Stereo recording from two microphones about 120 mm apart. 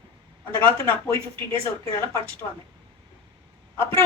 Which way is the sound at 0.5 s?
20° left (ahead or behind).